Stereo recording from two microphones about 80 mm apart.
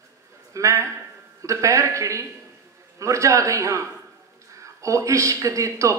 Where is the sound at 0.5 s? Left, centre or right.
Right.